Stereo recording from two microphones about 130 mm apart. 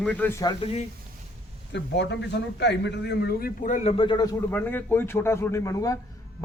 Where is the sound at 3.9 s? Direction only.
40° left (ahead or behind).